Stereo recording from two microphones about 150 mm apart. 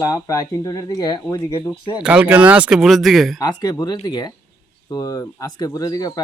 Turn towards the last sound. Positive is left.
turn(degrees=25)  # may be behind; listen again after turning